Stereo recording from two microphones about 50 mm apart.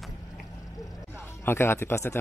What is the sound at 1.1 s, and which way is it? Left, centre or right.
Speech, left.